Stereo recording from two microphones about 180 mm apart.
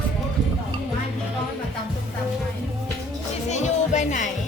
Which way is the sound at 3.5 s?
40° left (ahead or behind).